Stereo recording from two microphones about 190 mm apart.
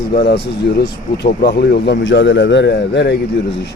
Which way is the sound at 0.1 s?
60° left (ahead or behind).